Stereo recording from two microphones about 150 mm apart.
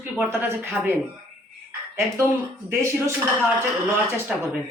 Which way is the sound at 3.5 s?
5° right (ahead or behind).